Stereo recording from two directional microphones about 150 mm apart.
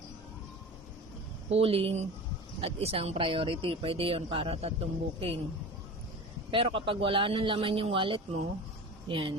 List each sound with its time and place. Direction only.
1.5 s speech: 40° right (ahead or behind)
6.5 s speech: 35° right (ahead or behind)